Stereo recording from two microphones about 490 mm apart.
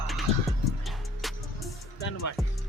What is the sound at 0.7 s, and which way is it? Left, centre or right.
Music, centre.